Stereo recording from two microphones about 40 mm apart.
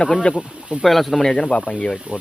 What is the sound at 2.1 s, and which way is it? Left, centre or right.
Speech, right.